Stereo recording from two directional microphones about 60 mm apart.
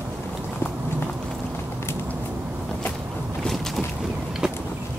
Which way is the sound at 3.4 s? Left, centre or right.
Centre.